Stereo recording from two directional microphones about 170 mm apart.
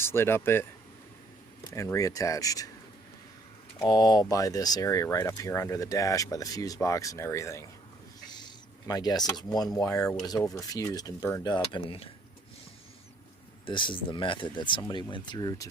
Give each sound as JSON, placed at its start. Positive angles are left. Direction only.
{"t": 0.0, "sound": "speech", "side_deg": 15}
{"t": 1.6, "sound": "speech", "side_deg": 20}
{"t": 3.8, "sound": "speech", "side_deg": 25}
{"t": 13.7, "sound": "speech", "side_deg": 30}